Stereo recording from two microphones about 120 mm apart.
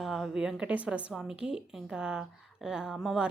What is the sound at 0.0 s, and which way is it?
A woman's voice, centre (ahead or behind).